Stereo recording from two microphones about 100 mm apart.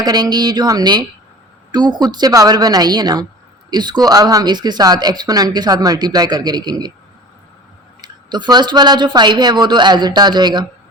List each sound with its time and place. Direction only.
0.0 s speech: 45° right (ahead or behind)
8.0 s speech: 45° right (ahead or behind)